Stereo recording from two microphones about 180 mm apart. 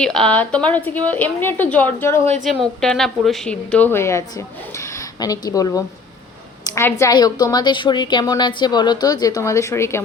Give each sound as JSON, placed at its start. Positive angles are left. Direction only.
{"t": 0.0, "sound": "a woman's voice", "side_deg": 5}
{"t": 2.4, "sound": "a woman's voice", "side_deg": 0}